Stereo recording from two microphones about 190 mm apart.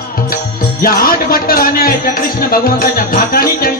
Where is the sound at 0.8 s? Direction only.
50° left (ahead or behind).